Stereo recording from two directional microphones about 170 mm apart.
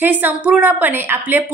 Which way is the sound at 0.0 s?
10° right (ahead or behind).